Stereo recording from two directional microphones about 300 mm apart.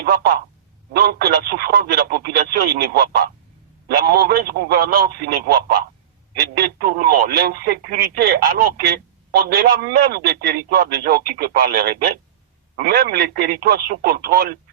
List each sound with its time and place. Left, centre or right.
0.0 s speech: right